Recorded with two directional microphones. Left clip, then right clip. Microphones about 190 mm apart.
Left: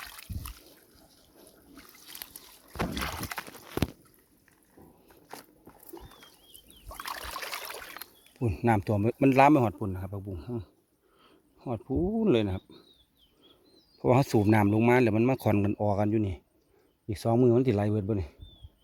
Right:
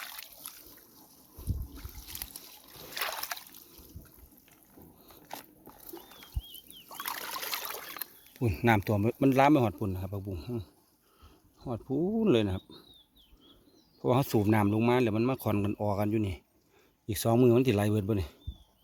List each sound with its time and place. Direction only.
2.2 s boat: 20° left (ahead or behind)
2.9 s a sound: 5° left (ahead or behind)
6.8 s a sound: 20° left (ahead or behind)
8.4 s speech: centre (ahead or behind)
8.7 s speech: 15° left (ahead or behind)
9.6 s speech: centre (ahead or behind)
14.0 s speech: 25° left (ahead or behind)
17.1 s speech: 5° left (ahead or behind)